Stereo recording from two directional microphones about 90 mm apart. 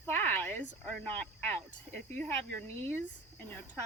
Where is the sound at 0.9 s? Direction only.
20° left (ahead or behind).